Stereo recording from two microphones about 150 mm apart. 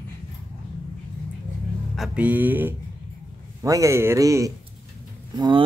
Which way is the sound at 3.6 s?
20° right (ahead or behind).